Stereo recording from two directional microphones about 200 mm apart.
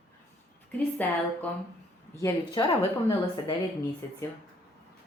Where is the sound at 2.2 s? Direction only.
15° left (ahead or behind).